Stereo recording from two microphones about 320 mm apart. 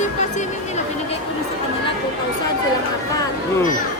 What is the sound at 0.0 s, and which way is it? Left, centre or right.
Music, left.